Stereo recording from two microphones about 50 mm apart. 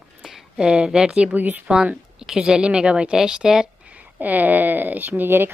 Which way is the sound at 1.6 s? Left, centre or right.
Centre.